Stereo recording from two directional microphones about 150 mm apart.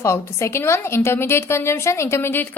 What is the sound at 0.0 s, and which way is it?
A woman's voice, 20° left (ahead or behind).